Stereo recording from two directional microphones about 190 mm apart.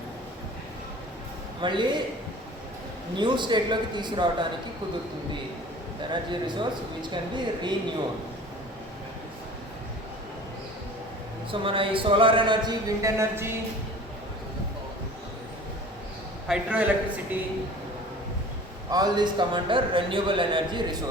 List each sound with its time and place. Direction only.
1.6 s a man's voice: 25° right (ahead or behind)
3.2 s a man's voice: 25° right (ahead or behind)
6.1 s a man's voice: 25° right (ahead or behind)
11.6 s a man's voice: 25° right (ahead or behind)
16.5 s a man's voice: 5° right (ahead or behind)
18.9 s a man's voice: 20° right (ahead or behind)